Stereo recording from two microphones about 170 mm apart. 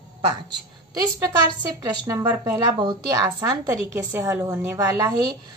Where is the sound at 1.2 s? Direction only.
25° right (ahead or behind).